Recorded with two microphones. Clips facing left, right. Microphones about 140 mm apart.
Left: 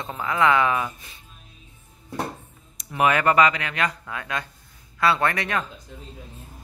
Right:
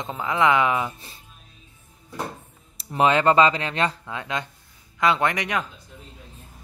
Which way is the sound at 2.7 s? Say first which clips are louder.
Right 2 dB; 30° right (ahead or behind).